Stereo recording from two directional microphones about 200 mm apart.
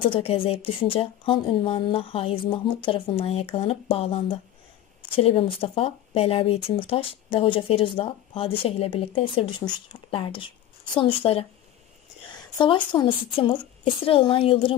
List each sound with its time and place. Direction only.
0.0 s speech: 25° left (ahead or behind)